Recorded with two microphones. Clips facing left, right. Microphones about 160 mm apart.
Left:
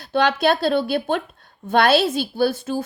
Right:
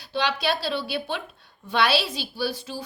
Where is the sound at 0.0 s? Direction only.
50° left (ahead or behind).